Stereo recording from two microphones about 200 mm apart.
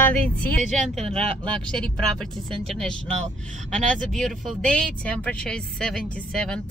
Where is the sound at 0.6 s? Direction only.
35° right (ahead or behind).